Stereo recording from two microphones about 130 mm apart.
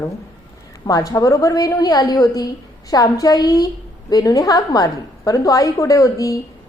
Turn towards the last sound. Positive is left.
turn(degrees=25)  # may be behind; listen again after turning